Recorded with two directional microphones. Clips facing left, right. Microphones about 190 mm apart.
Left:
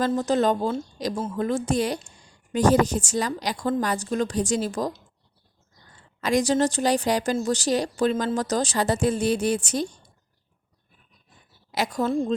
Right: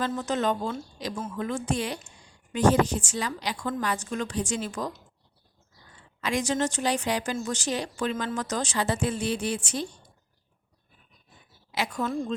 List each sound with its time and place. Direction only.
0.0 s speech: 35° left (ahead or behind)
6.1 s speech: 40° left (ahead or behind)
11.7 s speech: 40° left (ahead or behind)